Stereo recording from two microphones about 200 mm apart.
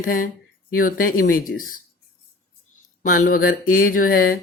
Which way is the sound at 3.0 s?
45° left (ahead or behind).